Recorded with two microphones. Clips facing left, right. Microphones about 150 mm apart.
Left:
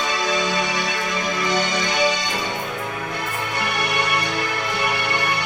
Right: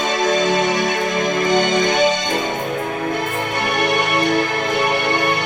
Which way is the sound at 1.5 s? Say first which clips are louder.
Right 8 dB; 25° right (ahead or behind).